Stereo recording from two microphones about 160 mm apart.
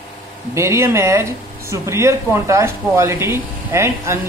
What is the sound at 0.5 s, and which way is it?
Speech, 15° right (ahead or behind).